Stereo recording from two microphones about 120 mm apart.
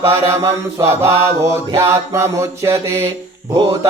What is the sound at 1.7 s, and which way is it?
Mantra, 20° right (ahead or behind).